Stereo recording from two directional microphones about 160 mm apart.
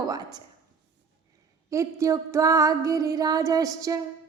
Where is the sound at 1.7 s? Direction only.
20° right (ahead or behind).